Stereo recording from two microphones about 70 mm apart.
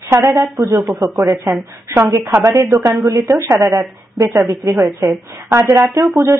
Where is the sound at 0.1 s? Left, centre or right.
Right.